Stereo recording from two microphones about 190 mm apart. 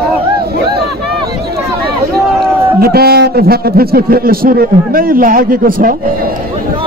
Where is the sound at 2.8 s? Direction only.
55° right (ahead or behind).